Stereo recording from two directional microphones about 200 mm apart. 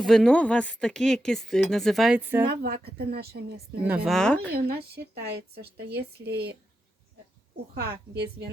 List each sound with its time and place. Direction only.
0.0 s speech: centre (ahead or behind)
2.5 s a woman's voice: 50° right (ahead or behind)
3.8 s speech: 5° right (ahead or behind)
5.2 s speech: 55° right (ahead or behind)
7.8 s speech: 55° right (ahead or behind)